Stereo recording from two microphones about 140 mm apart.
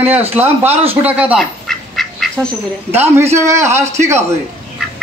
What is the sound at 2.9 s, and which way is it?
A man's voice, 15° right (ahead or behind).